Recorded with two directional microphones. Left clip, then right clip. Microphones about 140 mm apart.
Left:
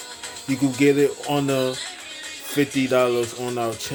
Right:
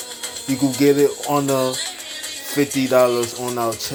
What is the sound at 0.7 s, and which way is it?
Speech, 15° left (ahead or behind).